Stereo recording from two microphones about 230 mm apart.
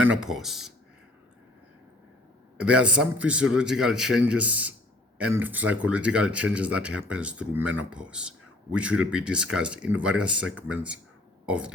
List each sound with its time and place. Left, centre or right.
0.0 s speech: centre
2.6 s speech: centre